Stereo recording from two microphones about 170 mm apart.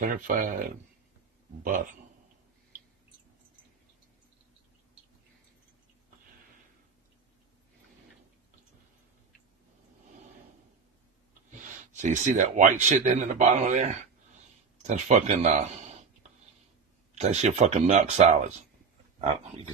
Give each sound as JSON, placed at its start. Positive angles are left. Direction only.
{"t": 0.0, "sound": "a man's voice", "side_deg": -50}
{"t": 12.0, "sound": "a man's voice", "side_deg": -45}